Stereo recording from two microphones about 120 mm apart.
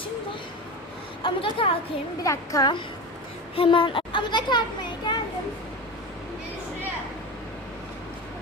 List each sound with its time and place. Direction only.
1.2 s a woman's voice: 45° left (ahead or behind)
2.2 s speech: 25° left (ahead or behind)
3.5 s speech: 50° left (ahead or behind)
5.1 s a sound: 40° left (ahead or behind)